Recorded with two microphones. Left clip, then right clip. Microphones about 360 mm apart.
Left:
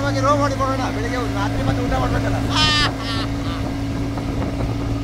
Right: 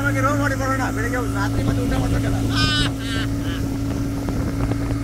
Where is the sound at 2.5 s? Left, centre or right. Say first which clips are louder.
Left 4 dB; centre.